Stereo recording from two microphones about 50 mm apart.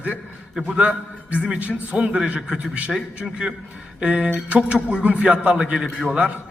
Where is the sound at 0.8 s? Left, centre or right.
Right.